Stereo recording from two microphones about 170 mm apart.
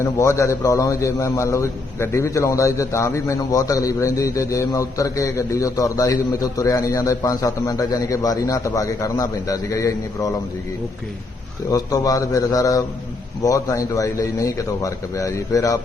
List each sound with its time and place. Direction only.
0.0 s a man's voice: 15° left (ahead or behind)
11.7 s a man's voice: 20° left (ahead or behind)